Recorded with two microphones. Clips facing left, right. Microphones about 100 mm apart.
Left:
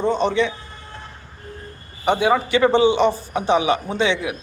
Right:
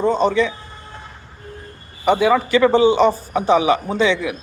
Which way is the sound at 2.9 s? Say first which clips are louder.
Right 3 dB; 45° right (ahead or behind).